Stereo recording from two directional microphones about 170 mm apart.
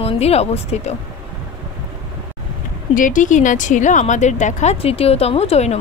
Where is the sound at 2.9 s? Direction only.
50° left (ahead or behind).